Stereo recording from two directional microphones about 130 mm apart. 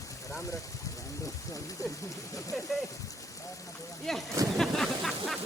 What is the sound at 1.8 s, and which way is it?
Speech, 25° left (ahead or behind).